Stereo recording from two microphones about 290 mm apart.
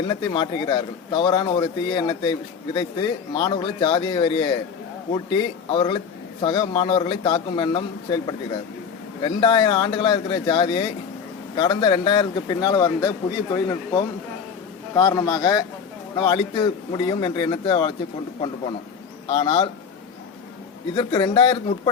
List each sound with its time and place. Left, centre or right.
0.1 s speech: centre
9.2 s speech: centre
19.3 s speech: centre
20.9 s speech: centre